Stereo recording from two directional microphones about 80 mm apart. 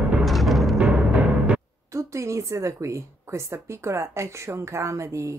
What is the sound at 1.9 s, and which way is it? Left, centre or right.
A woman's voice, right.